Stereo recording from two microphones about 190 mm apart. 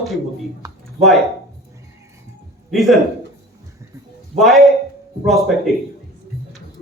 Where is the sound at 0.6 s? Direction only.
15° right (ahead or behind).